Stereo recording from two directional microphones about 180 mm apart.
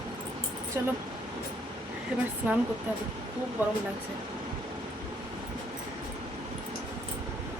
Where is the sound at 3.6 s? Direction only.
10° right (ahead or behind).